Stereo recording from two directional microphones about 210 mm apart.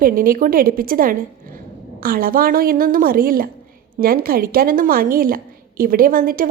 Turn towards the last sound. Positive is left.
turn(degrees=-40)  # may be behind; listen again after turning